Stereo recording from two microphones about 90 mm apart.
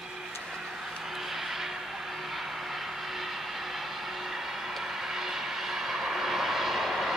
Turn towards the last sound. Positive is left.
turn(degrees=0)  # may be behind; listen again after turning